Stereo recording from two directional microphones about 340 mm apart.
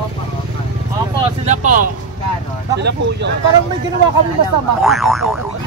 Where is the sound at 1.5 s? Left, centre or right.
Right.